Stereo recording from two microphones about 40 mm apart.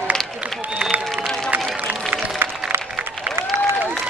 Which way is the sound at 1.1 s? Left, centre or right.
Centre.